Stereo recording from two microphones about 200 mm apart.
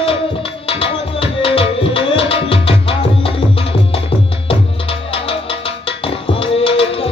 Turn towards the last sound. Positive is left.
turn(degrees=30)  # may be behind; listen again after turning